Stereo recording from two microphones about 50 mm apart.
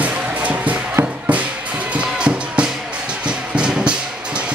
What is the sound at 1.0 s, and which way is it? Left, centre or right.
Music, right.